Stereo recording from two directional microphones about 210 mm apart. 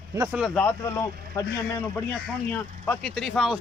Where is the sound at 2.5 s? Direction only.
5° left (ahead or behind).